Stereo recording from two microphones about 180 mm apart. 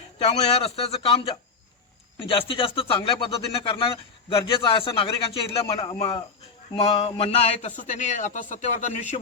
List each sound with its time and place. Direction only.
0.2 s a man's voice: 35° left (ahead or behind)